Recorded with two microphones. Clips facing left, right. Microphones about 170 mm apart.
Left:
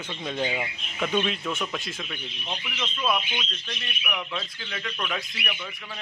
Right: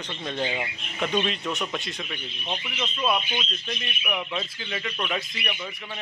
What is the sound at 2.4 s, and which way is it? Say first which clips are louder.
Speech: right 3 dB; 15° right (ahead or behind).